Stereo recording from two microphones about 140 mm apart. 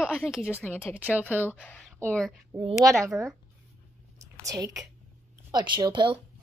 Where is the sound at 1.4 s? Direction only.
10° left (ahead or behind).